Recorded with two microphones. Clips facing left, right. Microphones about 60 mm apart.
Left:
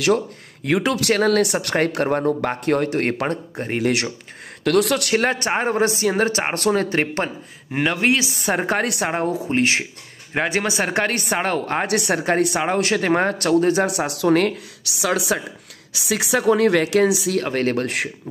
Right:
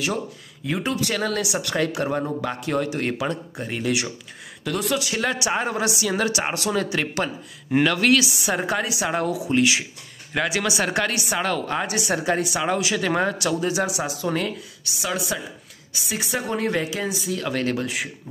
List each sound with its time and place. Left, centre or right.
0.7 s speech: left
1.1 s speech: left
4.6 s speech: left
5.3 s speech: left
7.8 s speech: left
8.4 s speech: left
16.1 s speech: left
17.4 s speech: left